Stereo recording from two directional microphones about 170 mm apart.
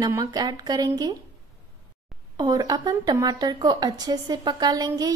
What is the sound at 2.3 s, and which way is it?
A woman's voice, 20° right (ahead or behind).